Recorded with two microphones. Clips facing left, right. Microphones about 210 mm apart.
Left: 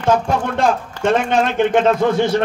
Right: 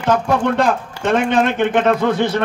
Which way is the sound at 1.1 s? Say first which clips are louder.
Right 2 dB; 55° right (ahead or behind).